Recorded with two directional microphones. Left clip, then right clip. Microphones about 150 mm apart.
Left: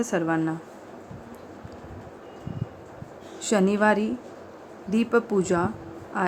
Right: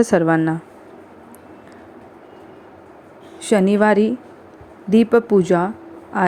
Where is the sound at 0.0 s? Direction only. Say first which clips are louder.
Right 9 dB; 40° right (ahead or behind).